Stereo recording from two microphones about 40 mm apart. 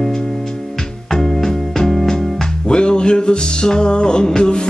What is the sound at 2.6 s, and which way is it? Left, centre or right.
Music, left.